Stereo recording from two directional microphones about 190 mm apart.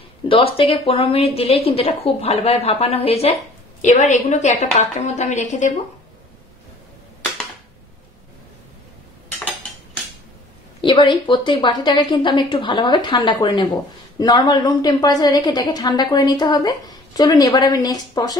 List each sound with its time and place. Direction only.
0.3 s a woman's voice: 30° left (ahead or behind)
10.8 s a woman's voice: 25° left (ahead or behind)